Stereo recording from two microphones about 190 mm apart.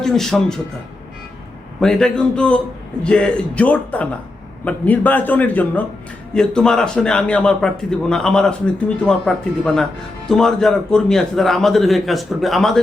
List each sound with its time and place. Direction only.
0.0 s a man's voice: centre (ahead or behind)
1.8 s a man's voice: centre (ahead or behind)